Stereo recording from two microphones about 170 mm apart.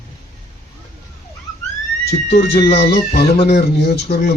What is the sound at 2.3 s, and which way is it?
A man's voice, 70° left (ahead or behind).